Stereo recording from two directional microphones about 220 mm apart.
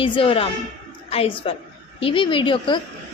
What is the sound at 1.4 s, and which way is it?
A woman's voice, 25° left (ahead or behind).